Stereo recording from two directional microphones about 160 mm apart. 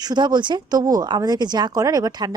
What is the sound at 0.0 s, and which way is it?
Speech, 25° right (ahead or behind).